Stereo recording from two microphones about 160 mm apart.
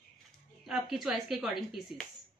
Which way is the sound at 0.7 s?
Centre (ahead or behind).